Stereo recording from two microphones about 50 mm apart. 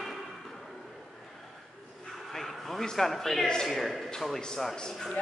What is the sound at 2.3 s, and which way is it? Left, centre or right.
A man's voice, centre.